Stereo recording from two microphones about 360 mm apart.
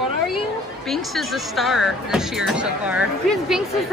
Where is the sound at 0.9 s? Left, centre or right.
Centre.